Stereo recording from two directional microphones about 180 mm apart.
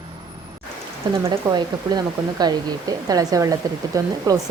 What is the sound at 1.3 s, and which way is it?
Speech, 25° right (ahead or behind).